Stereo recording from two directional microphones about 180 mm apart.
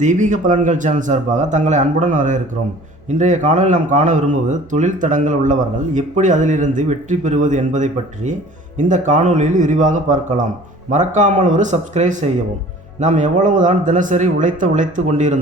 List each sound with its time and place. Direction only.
0.0 s speech: 45° right (ahead or behind)